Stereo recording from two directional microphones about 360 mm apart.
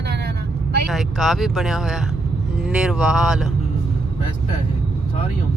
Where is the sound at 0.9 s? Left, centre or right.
Centre.